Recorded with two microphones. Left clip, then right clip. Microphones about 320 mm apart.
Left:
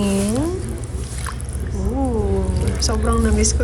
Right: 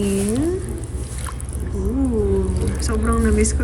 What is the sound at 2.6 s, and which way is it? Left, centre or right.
Speech, centre.